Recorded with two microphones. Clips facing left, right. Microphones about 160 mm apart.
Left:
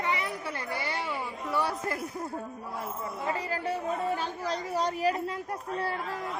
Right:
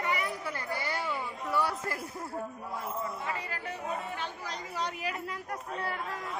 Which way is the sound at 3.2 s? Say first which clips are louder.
Left 6 dB; 35° left (ahead or behind).